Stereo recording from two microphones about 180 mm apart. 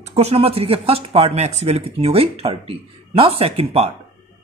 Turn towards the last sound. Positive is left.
turn(degrees=-35)  # may be behind; listen again after turning